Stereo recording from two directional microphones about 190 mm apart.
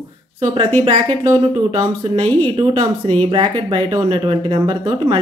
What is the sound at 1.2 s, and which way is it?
Speech, 20° right (ahead or behind).